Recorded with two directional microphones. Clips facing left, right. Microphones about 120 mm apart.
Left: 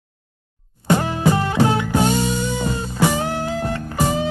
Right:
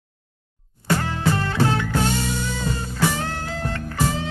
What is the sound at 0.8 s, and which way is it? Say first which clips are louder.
Music: left 5 dB; 20° left (ahead or behind).